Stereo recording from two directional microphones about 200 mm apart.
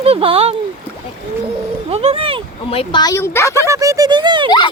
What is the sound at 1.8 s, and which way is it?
Speech, 30° right (ahead or behind).